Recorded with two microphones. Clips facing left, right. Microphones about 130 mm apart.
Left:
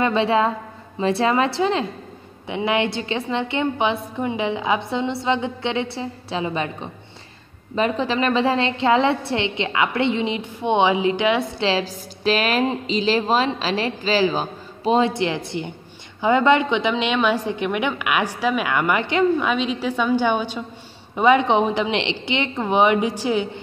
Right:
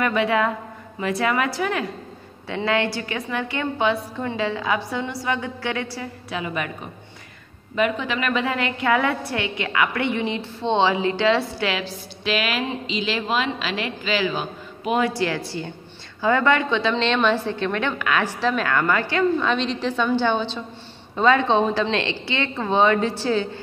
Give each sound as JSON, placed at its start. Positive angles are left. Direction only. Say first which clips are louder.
{"t": 0.0, "sound": "a woman's voice", "louder": "left 2 dB", "side_deg": 25}
{"t": 11.8, "sound": "a woman's voice", "louder": "left 5 dB", "side_deg": 40}
{"t": 19.5, "sound": "a woman's voice", "louder": "left 1 dB", "side_deg": 5}